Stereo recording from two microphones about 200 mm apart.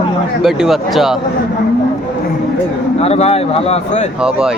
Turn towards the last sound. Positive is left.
turn(degrees=35)  # may be behind; listen again after turning